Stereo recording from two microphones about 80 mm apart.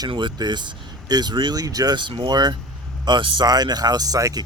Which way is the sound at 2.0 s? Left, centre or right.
Right.